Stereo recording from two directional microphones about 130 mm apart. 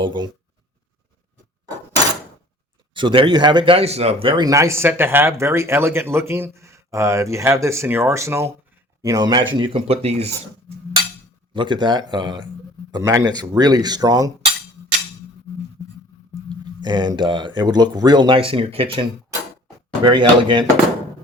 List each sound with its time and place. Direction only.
0.0 s speech: 35° right (ahead or behind)
2.9 s speech: 40° right (ahead or behind)
4.4 s speech: 25° right (ahead or behind); by 10.3 s 50° right (ahead or behind)
11.5 s speech: 35° right (ahead or behind)
16.8 s speech: 35° right (ahead or behind)
20.1 s speech: 35° right (ahead or behind)